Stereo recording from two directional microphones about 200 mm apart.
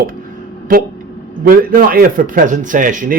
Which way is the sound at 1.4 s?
45° right (ahead or behind).